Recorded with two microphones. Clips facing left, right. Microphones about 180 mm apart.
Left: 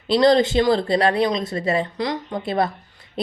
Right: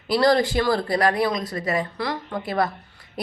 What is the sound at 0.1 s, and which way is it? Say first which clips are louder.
A woman's voice: left 3 dB; 20° left (ahead or behind).